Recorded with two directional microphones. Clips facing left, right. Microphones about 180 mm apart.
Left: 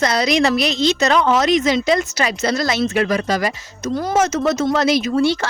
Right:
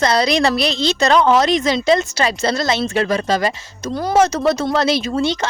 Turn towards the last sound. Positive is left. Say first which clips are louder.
# left 2 dB
turn(degrees=-25)  # may be behind; listen again after turning